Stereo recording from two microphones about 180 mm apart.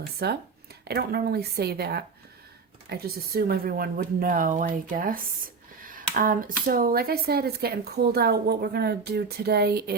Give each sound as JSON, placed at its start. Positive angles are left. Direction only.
{"t": 0.2, "sound": "speech", "side_deg": -65}